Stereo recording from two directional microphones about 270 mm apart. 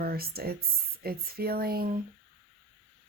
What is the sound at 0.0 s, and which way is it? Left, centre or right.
Speech, right.